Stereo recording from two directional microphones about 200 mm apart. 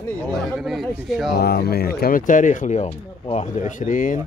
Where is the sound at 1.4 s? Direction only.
50° left (ahead or behind).